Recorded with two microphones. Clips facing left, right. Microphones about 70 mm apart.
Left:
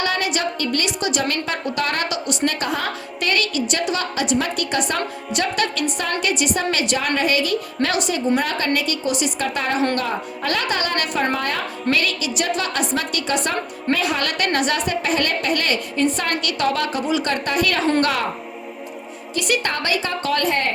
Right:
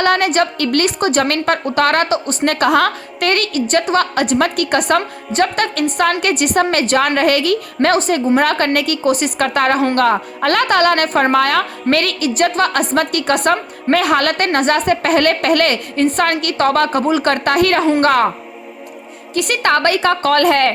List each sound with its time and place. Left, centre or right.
0.0 s a woman's voice: right
2.0 s a woman's voice: right
2.4 s a woman's voice: right
7.9 s a woman's voice: right
8.4 s a woman's voice: right
19.4 s a woman's voice: right